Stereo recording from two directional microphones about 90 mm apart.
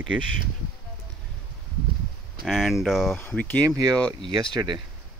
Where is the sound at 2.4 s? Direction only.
Centre (ahead or behind).